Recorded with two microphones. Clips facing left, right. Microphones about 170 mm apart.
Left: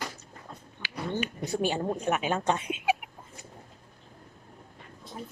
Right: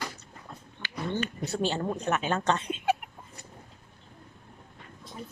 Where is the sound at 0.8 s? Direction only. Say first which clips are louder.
Right 1 dB; 10° left (ahead or behind).